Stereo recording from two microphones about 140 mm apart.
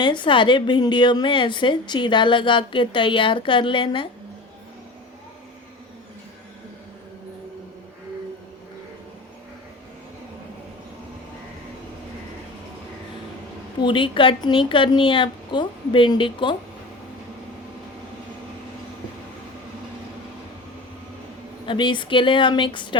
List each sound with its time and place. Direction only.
0.0 s a woman's voice: 35° left (ahead or behind)
13.8 s a woman's voice: 35° left (ahead or behind)
21.7 s a woman's voice: 35° left (ahead or behind)